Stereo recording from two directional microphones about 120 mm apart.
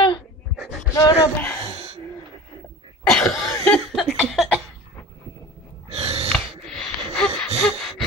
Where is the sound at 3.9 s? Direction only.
Centre (ahead or behind).